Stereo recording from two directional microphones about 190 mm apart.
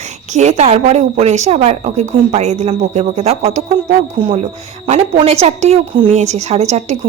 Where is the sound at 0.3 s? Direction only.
35° right (ahead or behind).